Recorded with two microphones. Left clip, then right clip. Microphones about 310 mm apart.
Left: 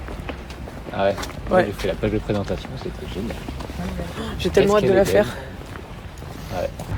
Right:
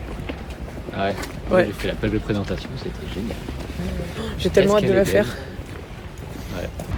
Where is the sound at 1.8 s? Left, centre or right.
Centre.